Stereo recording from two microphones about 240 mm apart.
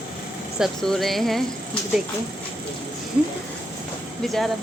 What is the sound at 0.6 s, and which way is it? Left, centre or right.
Speech, centre.